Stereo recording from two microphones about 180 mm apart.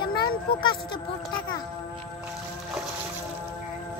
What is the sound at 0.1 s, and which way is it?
Speech, 25° left (ahead or behind).